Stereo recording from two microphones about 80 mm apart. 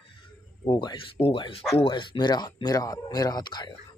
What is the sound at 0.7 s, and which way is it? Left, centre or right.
Speech, left.